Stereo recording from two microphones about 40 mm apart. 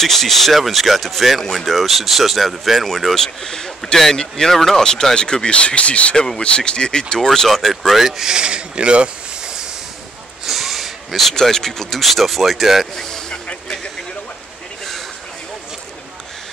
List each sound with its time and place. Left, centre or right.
0.0 s speech: centre; by 6.1 s left
6.1 s speech: centre
7.2 s speech: centre
7.9 s speech: centre
8.3 s speech: right
9.4 s train: centre
10.4 s speech: centre
12.9 s speech: centre